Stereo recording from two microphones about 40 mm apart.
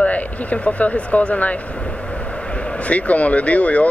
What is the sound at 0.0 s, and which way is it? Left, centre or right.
Speech, left.